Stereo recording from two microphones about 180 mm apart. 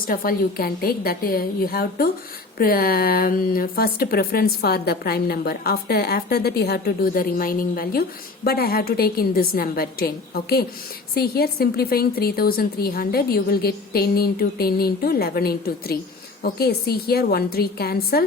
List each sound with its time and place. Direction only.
0.1 s speech: 55° left (ahead or behind)